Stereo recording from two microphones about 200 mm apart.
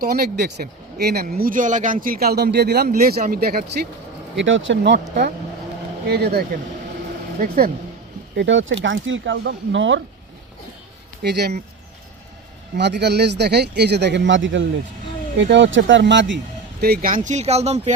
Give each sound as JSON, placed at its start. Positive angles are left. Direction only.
{"t": 0.0, "sound": "speech", "side_deg": -50}
{"t": 4.4, "sound": "speech", "side_deg": -70}
{"t": 8.4, "sound": "speech", "side_deg": -70}
{"t": 11.2, "sound": "speech", "side_deg": -55}
{"t": 12.7, "sound": "speech", "side_deg": -55}
{"t": 16.8, "sound": "speech", "side_deg": -50}
{"t": 17.2, "sound": "speech", "side_deg": -35}